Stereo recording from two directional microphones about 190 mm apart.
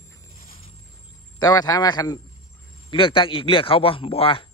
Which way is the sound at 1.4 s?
20° left (ahead or behind).